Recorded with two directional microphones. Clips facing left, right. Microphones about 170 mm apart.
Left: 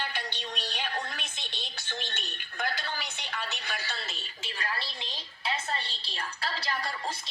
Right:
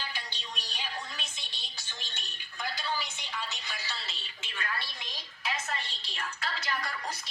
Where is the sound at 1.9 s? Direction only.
60° left (ahead or behind).